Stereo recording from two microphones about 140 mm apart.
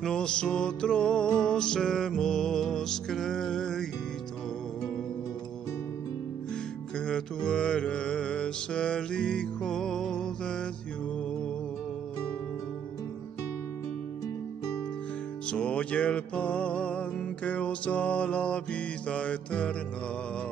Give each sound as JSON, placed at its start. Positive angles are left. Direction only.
{"t": 0.0, "sound": "music", "side_deg": 5}
{"t": 6.5, "sound": "music", "side_deg": 5}
{"t": 15.5, "sound": "music", "side_deg": 10}